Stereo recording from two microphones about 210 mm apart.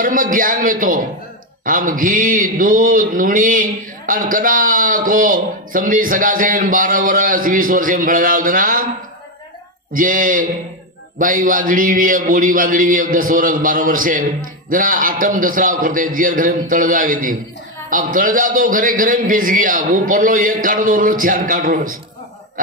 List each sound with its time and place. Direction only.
0.0 s speech: 40° right (ahead or behind)
9.9 s speech: 40° right (ahead or behind)